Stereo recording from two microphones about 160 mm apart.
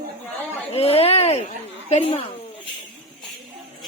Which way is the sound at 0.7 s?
40° left (ahead or behind).